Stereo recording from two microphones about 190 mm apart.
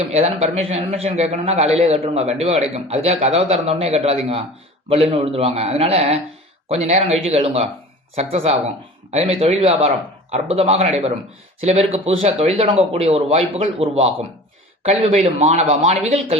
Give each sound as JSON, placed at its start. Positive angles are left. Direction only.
{"t": 0.0, "sound": "a man's voice", "side_deg": -30}